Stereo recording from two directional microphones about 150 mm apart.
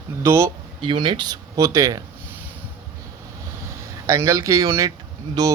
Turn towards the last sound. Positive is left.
turn(degrees=-25)  # may be behind; listen again after turning